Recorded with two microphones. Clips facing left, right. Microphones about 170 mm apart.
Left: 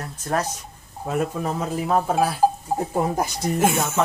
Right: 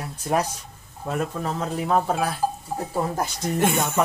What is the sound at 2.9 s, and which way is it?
Speech, 15° left (ahead or behind).